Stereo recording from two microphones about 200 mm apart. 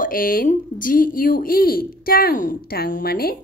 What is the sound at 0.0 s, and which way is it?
A woman's voice, 45° left (ahead or behind).